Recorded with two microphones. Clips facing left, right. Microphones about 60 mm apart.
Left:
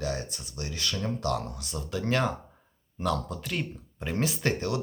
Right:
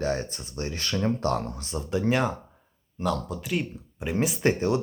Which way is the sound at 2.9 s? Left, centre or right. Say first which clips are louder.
Right 2 dB; centre.